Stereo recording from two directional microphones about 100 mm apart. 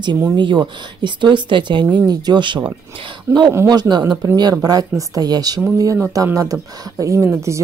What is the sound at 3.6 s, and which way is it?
A woman's voice, 45° right (ahead or behind).